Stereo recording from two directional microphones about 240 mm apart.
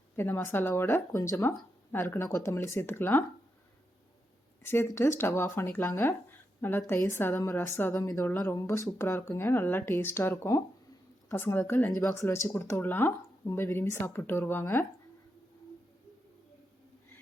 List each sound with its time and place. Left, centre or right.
0.2 s a woman's voice: centre
4.6 s a woman's voice: centre